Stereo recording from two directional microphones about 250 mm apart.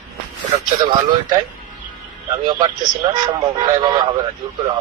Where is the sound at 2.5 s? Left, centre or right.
Centre.